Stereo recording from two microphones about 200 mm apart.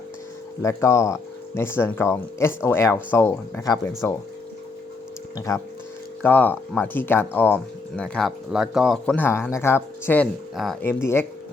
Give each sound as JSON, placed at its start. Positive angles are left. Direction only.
{"t": 0.6, "sound": "speech", "side_deg": 15}
{"t": 5.5, "sound": "speech", "side_deg": 15}
{"t": 10.5, "sound": "speech", "side_deg": 0}
{"t": 10.8, "sound": "speech", "side_deg": 10}